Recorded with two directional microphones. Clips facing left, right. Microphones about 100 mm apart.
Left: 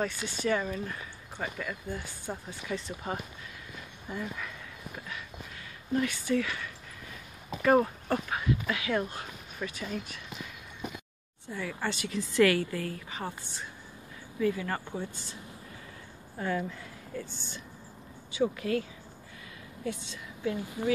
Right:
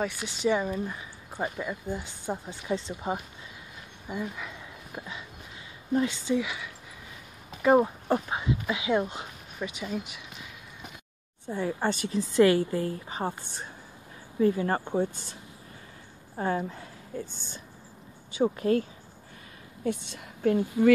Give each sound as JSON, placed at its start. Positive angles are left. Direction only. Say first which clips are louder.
{"t": 0.0, "sound": "speech", "louder": "right 3 dB", "side_deg": -10}
{"t": 4.1, "sound": "dog", "louder": "right 3 dB", "side_deg": -15}
{"t": 5.9, "sound": "speech", "louder": "right 2 dB", "side_deg": -25}
{"t": 11.5, "sound": "speech", "louder": "right 6 dB", "side_deg": -30}
{"t": 11.9, "sound": "speech", "louder": "right 5 dB", "side_deg": -40}
{"t": 12.4, "sound": "speech", "louder": "right 3 dB", "side_deg": -25}
{"t": 15.0, "sound": "speech", "louder": "right 10 dB", "side_deg": -55}
{"t": 16.3, "sound": "speech", "louder": "right 3 dB", "side_deg": -35}
{"t": 18.4, "sound": "speech", "louder": "right 4 dB", "side_deg": -40}
{"t": 19.8, "sound": "a woman's voice", "louder": "right 5 dB", "side_deg": -55}